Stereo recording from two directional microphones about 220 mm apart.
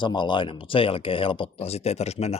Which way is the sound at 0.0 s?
20° left (ahead or behind).